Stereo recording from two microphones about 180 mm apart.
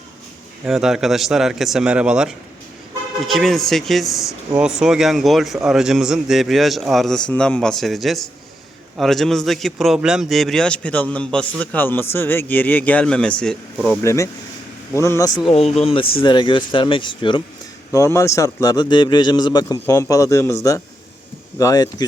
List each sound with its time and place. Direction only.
0.6 s a man's voice: 5° right (ahead or behind)
14.0 s speech: 15° left (ahead or behind)
15.8 s a man's voice: 30° left (ahead or behind)
17.9 s a man's voice: 15° left (ahead or behind)